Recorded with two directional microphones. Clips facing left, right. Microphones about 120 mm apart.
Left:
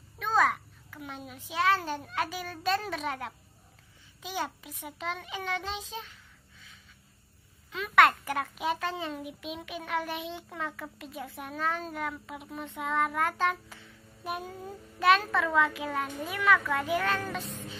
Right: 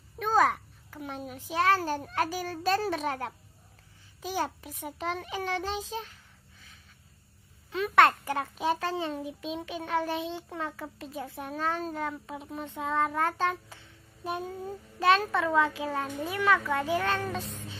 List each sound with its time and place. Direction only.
0.2 s a child's voice: 35° right (ahead or behind)
7.7 s a child's voice: 30° right (ahead or behind)